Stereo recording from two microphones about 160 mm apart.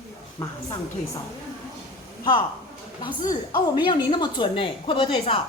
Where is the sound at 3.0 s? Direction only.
30° left (ahead or behind).